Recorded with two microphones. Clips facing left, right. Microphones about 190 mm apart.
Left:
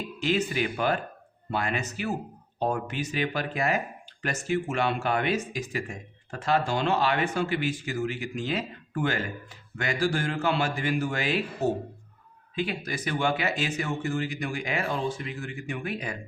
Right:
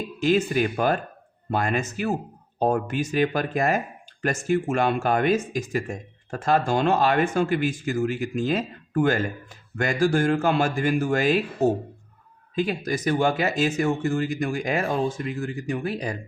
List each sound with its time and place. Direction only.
0.2 s speech: 45° right (ahead or behind)